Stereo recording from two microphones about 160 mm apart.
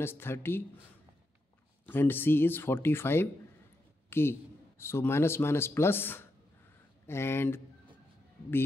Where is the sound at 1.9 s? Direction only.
10° left (ahead or behind).